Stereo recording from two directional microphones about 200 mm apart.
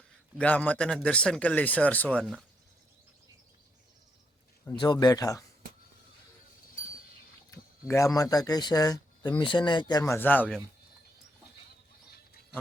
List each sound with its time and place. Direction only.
0.3 s a man's voice: 10° left (ahead or behind)
4.6 s speech: 20° left (ahead or behind)
7.9 s speech: 15° left (ahead or behind)
10.0 s a man's voice: 10° left (ahead or behind)